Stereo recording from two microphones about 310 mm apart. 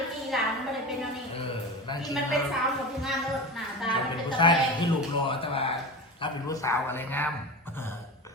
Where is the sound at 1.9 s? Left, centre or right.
Centre.